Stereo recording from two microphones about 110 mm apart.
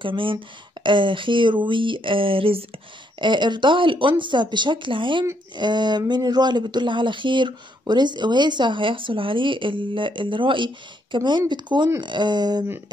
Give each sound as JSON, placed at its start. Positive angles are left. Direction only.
{"t": 0.0, "sound": "speech", "side_deg": -50}
{"t": 3.2, "sound": "speech", "side_deg": -45}